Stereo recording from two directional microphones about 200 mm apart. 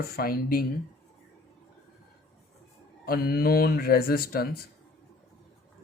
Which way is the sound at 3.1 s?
50° left (ahead or behind).